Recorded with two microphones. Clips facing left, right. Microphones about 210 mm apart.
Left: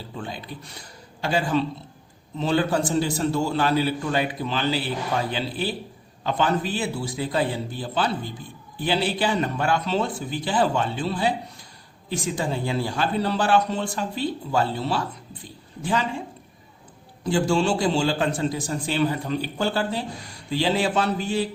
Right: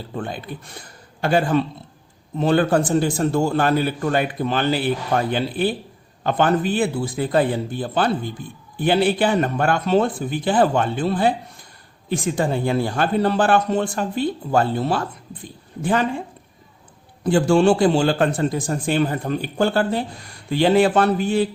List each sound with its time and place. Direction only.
0.1 s a man's voice: 55° right (ahead or behind)
17.2 s a man's voice: 55° right (ahead or behind)